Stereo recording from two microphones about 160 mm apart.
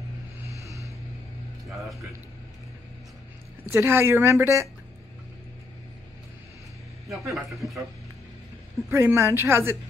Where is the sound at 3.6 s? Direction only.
15° right (ahead or behind).